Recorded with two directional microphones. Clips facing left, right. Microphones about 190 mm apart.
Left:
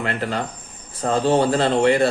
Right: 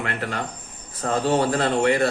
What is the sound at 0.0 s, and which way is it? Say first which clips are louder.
A man's voice: left 4 dB; 30° left (ahead or behind).